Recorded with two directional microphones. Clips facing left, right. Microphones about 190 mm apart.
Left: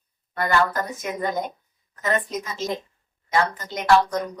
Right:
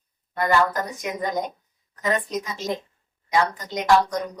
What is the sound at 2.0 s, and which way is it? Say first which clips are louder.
Speech: even; 15° right (ahead or behind).